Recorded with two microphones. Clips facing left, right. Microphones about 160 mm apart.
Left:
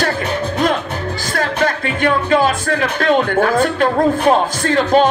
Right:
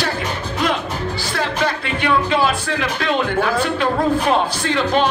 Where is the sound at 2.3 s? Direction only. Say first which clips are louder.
Left 4 dB; 45° left (ahead or behind).